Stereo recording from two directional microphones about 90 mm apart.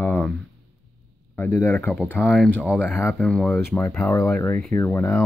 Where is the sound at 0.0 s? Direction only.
20° left (ahead or behind).